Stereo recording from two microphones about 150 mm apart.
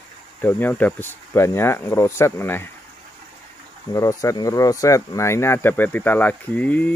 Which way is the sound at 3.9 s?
20° left (ahead or behind).